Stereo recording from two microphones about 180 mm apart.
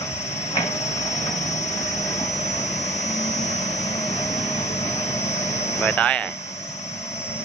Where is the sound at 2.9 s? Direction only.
40° left (ahead or behind).